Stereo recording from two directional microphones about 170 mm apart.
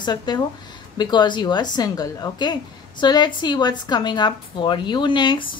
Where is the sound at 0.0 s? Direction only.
25° left (ahead or behind).